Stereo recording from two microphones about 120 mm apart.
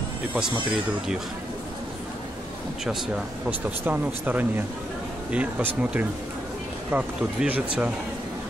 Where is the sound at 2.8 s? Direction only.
Centre (ahead or behind).